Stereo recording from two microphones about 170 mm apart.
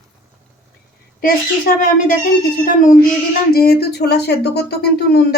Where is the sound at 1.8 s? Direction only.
50° left (ahead or behind).